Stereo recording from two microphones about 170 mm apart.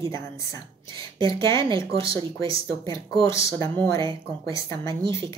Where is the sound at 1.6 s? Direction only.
30° right (ahead or behind).